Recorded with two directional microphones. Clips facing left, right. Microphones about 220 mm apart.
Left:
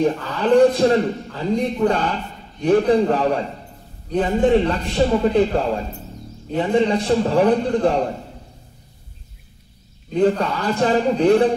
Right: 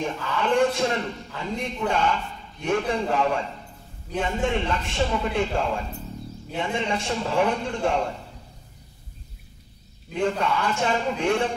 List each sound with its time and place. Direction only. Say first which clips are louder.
0.0 s a man's voice: left 7 dB; 35° left (ahead or behind)
10.1 s a man's voice: left 6 dB; 35° left (ahead or behind)